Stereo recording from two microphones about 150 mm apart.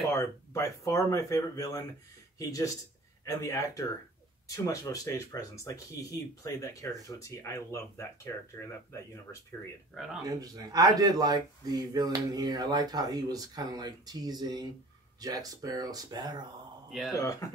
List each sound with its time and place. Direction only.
0.1 s speech: 20° left (ahead or behind)
10.2 s speech: 25° right (ahead or behind)
17.1 s speech: 20° left (ahead or behind)